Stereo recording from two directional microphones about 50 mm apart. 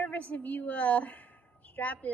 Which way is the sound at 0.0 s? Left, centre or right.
Left.